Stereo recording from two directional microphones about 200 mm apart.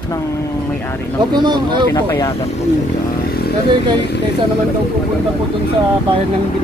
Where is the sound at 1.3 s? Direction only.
20° right (ahead or behind).